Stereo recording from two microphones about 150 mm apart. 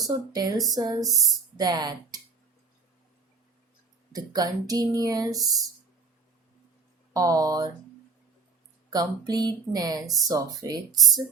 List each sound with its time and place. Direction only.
0.0 s speech: 25° right (ahead or behind)
4.1 s speech: 25° right (ahead or behind)
7.1 s speech: 25° right (ahead or behind)
8.9 s speech: 25° right (ahead or behind)